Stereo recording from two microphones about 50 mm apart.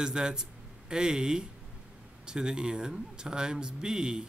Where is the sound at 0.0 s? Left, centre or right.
Centre.